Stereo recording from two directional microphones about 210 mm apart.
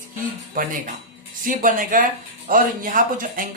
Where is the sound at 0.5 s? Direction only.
40° right (ahead or behind).